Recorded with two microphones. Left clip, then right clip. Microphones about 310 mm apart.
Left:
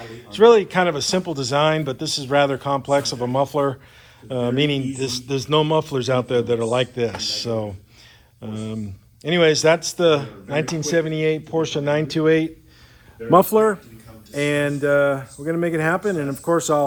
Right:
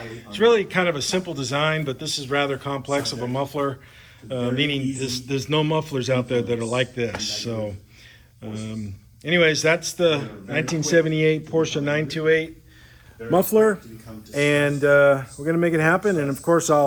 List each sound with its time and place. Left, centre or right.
0.0 s speech: centre
14.3 s speech: centre